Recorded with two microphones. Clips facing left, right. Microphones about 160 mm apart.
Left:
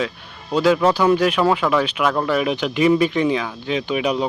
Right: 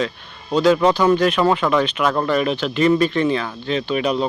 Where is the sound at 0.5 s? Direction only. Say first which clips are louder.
Right 1 dB; 5° left (ahead or behind).